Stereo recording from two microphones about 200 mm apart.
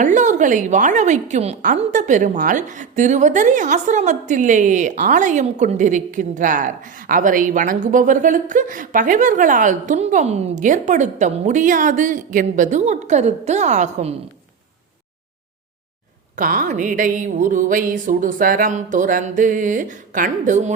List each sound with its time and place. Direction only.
0.0 s speech: 40° right (ahead or behind)
16.3 s speech: 40° right (ahead or behind)